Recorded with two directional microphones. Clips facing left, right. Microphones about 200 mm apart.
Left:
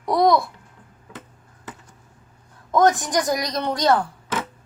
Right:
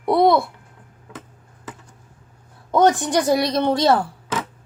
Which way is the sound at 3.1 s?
30° right (ahead or behind).